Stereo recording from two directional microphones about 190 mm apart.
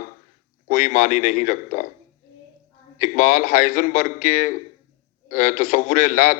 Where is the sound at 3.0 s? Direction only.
40° left (ahead or behind).